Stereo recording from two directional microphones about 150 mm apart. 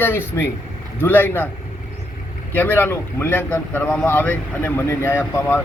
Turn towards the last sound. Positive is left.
turn(degrees=15)  # may be behind; listen again after turning